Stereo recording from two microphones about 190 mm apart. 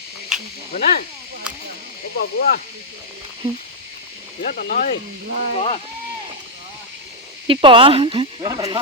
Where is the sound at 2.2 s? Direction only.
50° left (ahead or behind).